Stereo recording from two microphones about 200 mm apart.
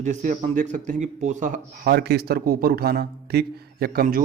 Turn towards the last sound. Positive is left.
turn(degrees=-50)  # may be behind; listen again after turning